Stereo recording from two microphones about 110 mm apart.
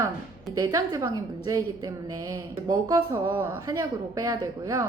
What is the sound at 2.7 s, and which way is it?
A woman's voice, 30° right (ahead or behind).